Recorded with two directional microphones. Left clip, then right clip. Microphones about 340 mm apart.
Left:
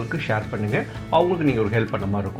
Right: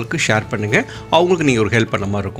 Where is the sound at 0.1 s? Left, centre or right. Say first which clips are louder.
Right 9 dB; right.